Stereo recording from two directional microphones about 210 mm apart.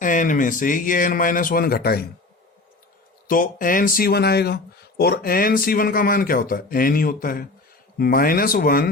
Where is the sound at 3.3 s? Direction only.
40° left (ahead or behind).